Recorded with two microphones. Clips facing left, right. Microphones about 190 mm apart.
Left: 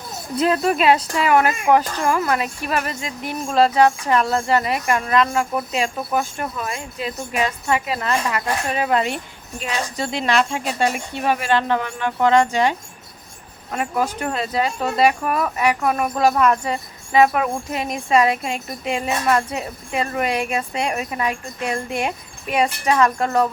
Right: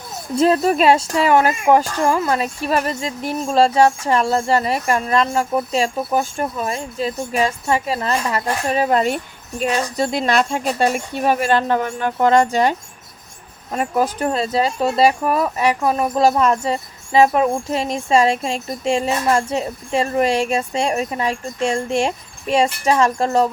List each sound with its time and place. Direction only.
0.3 s speech: 35° right (ahead or behind)